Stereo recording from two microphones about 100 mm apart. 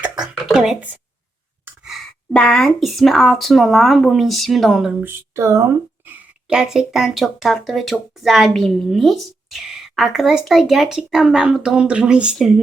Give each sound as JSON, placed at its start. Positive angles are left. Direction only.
{"t": 0.0, "sound": "a sound", "side_deg": -10}
{"t": 0.4, "sound": "speech", "side_deg": -5}
{"t": 1.8, "sound": "a sound", "side_deg": 0}
{"t": 2.3, "sound": "a woman's voice", "side_deg": 10}
{"t": 5.3, "sound": "speech", "side_deg": -30}
{"t": 6.5, "sound": "a woman's voice", "side_deg": -5}